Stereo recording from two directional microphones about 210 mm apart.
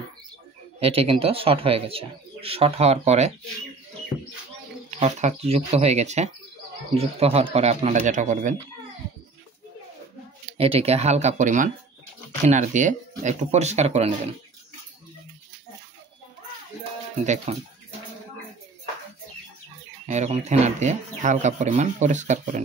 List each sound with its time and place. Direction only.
0.7 s speech: 25° right (ahead or behind)
5.0 s speech: 30° right (ahead or behind)
10.6 s speech: 30° right (ahead or behind)
17.5 s speech: 30° right (ahead or behind)
20.1 s speech: 30° right (ahead or behind)